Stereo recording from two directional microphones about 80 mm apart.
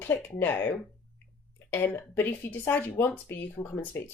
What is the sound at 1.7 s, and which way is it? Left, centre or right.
Speech, left.